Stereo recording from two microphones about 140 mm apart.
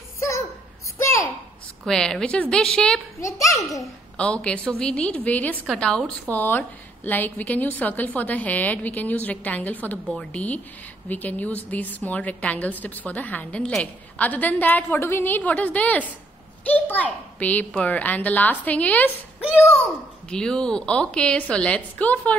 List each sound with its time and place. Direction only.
1.0 s a sound: 20° left (ahead or behind)
1.9 s a woman's voice: 5° left (ahead or behind)
3.2 s a child's voice: 20° left (ahead or behind)
4.2 s a woman's voice: 10° left (ahead or behind)
20.2 s a woman's voice: 5° left (ahead or behind)